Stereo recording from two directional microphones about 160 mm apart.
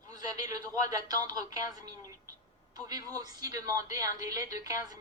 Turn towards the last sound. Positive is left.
turn(degrees=-20)  # may be behind; listen again after turning